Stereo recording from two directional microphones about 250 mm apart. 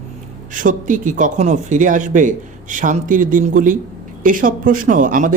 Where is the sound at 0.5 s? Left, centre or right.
Right.